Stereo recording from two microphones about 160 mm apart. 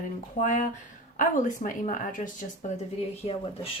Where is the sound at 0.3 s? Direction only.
55° left (ahead or behind).